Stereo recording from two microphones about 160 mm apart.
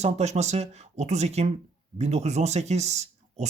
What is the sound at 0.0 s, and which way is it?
Speech, 45° right (ahead or behind).